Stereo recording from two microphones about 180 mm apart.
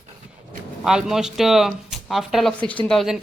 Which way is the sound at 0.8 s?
5° right (ahead or behind).